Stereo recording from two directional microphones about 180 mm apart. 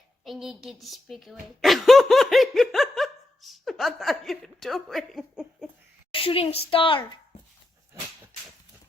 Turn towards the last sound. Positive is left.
turn(degrees=30)  # may be behind; listen again after turning